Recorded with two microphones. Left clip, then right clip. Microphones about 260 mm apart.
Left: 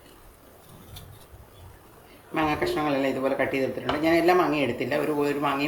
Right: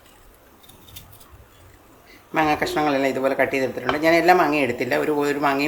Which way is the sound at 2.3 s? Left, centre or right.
Centre.